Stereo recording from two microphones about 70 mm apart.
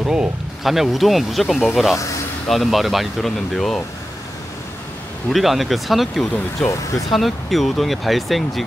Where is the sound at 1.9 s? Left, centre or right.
Left.